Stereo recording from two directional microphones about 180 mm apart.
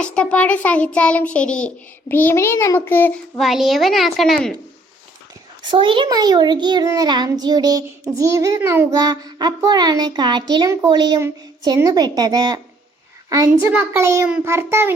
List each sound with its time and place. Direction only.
0.0 s a child's voice: 5° left (ahead or behind)
3.3 s a child's voice: centre (ahead or behind)
5.7 s a child's voice: 30° right (ahead or behind)